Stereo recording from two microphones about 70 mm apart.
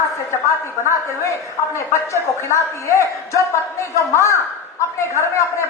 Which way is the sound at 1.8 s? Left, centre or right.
Left.